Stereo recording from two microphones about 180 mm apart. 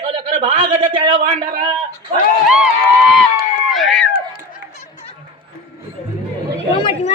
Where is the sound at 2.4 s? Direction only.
5° right (ahead or behind).